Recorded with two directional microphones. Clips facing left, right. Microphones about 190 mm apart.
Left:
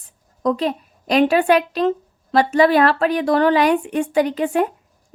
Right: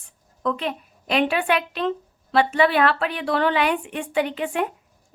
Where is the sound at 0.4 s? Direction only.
35° left (ahead or behind).